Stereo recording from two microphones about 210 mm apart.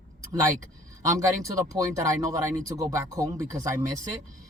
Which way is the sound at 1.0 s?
15° right (ahead or behind).